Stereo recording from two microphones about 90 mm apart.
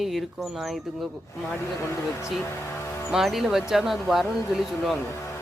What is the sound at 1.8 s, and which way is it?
Speech, 30° left (ahead or behind).